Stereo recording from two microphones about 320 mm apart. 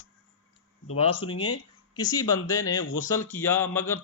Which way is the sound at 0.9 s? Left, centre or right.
Centre.